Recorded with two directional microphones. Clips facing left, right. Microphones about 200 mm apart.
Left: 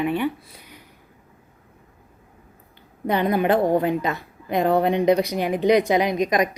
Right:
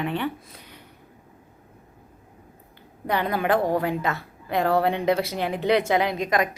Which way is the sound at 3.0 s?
20° left (ahead or behind).